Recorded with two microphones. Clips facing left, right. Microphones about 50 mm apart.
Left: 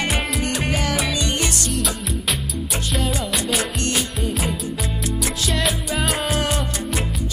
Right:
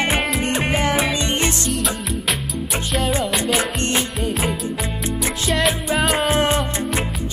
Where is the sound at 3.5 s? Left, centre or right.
Right.